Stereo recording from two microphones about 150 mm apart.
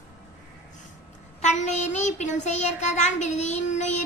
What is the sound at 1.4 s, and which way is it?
Child singing, 50° left (ahead or behind).